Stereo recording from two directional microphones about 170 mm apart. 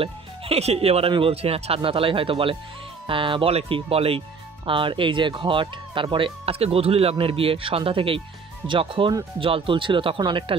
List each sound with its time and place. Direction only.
0.0 s speech: 35° right (ahead or behind)